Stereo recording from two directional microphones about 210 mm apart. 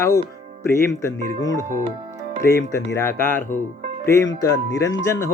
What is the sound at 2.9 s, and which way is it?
Speech, 15° left (ahead or behind).